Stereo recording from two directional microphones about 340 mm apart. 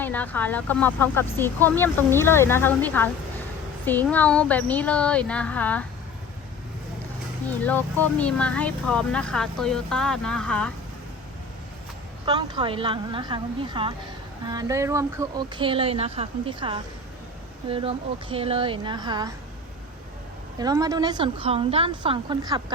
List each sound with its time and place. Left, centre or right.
0.0 s speech: centre
8.2 s speech: centre
12.2 s speech: centre
20.6 s speech: centre